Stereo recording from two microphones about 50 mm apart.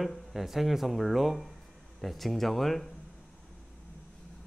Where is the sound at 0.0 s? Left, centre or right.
Centre.